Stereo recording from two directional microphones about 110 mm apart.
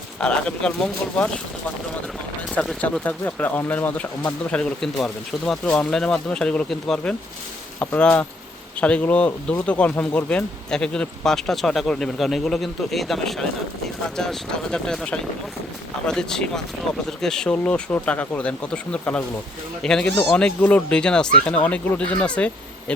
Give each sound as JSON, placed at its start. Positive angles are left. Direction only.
{"t": 0.2, "sound": "speech", "side_deg": 10}
{"t": 2.6, "sound": "speech", "side_deg": 5}